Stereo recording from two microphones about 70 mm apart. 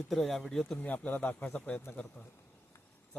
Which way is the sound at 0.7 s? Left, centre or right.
Centre.